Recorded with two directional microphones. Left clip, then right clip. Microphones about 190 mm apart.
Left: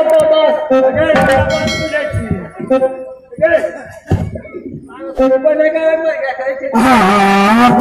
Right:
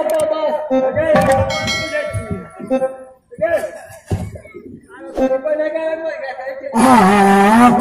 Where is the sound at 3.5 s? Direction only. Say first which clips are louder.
Left 6 dB; 45° left (ahead or behind).